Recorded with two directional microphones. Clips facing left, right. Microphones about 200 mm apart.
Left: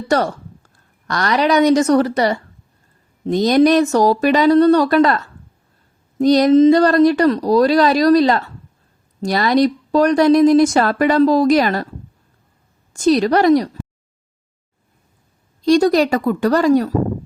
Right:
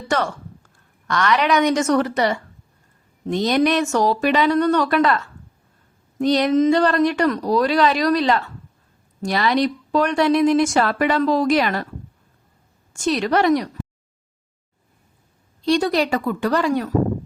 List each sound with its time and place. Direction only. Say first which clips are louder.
0.1 s speech: left 5 dB; 35° left (ahead or behind)
12.9 s speech: left 6 dB; 35° left (ahead or behind)
15.6 s speech: left 6 dB; 45° left (ahead or behind)